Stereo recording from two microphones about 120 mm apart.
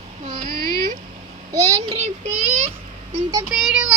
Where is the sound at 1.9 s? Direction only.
65° right (ahead or behind).